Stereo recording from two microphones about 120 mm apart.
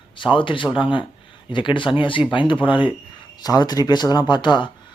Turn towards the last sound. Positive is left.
turn(degrees=40)  # may be behind; listen again after turning